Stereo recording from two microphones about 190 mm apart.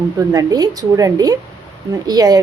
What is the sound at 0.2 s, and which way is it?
A woman's voice, 20° right (ahead or behind).